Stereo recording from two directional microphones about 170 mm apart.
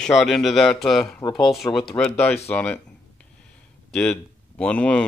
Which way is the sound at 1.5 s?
Centre (ahead or behind).